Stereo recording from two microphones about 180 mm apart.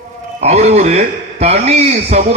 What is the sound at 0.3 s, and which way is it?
A man's voice, 35° right (ahead or behind).